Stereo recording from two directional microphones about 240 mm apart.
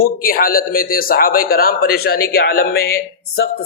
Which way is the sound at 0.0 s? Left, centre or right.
Left.